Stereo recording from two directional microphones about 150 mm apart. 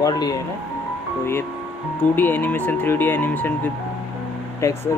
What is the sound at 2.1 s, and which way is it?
Speech, 10° left (ahead or behind).